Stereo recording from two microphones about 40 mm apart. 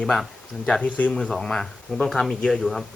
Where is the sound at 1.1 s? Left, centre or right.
Centre.